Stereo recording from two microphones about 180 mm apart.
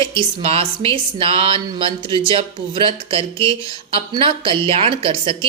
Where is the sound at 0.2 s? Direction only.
30° right (ahead or behind).